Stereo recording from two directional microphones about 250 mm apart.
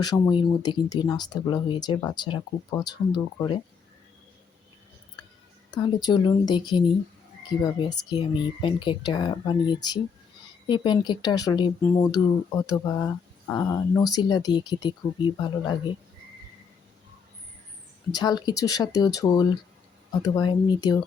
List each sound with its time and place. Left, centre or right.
0.0 s speech: centre
5.7 s speech: centre
18.1 s speech: centre